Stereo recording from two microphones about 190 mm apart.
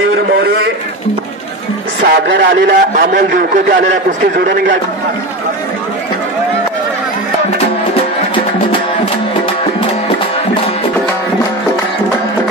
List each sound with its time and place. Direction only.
0.4 s a man's voice: 55° right (ahead or behind)
2.0 s speech: 60° right (ahead or behind)
2.5 s a man's voice: 45° right (ahead or behind)